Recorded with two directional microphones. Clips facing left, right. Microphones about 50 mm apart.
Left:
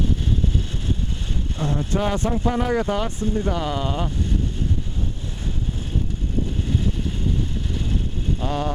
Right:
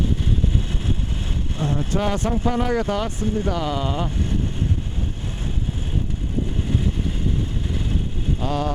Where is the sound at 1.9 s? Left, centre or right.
Centre.